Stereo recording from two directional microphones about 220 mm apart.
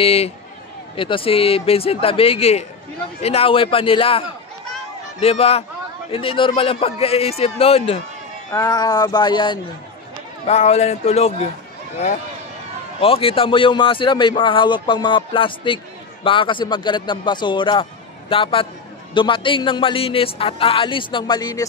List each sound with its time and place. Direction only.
0.0 s speech: 25° left (ahead or behind)
13.0 s speech: 25° left (ahead or behind)